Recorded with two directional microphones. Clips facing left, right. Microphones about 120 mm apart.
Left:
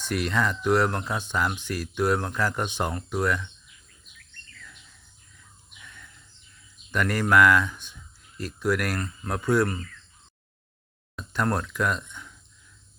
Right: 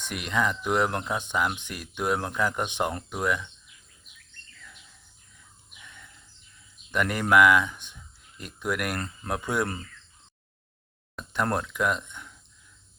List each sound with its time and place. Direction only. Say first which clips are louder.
0.0 s speech: left 2 dB; 15° right (ahead or behind)
5.8 s a sound: left 1 dB; 20° right (ahead or behind)
6.9 s speech: even; 20° right (ahead or behind)
11.3 s speech: left 1 dB; 20° right (ahead or behind)